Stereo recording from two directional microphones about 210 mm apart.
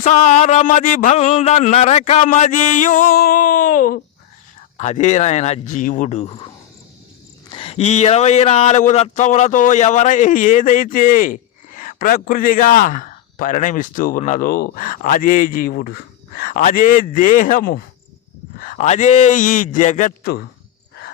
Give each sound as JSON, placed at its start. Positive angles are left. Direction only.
{"t": 0.0, "sound": "speech", "side_deg": 35}
{"t": 4.8, "sound": "speech", "side_deg": 35}
{"t": 7.5, "sound": "speech", "side_deg": 25}